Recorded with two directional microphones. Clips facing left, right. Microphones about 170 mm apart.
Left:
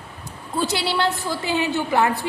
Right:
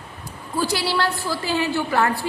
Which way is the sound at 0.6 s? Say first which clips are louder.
Even; 20° left (ahead or behind).